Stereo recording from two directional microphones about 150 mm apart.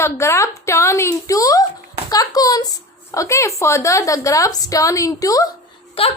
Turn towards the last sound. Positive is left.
turn(degrees=35)  # may be behind; listen again after turning